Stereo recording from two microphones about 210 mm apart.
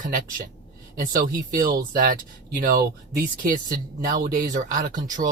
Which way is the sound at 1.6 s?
45° right (ahead or behind).